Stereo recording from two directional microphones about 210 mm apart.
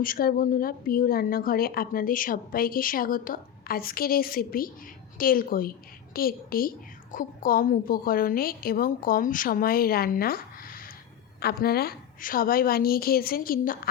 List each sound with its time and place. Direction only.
0.0 s a woman's voice: 45° left (ahead or behind)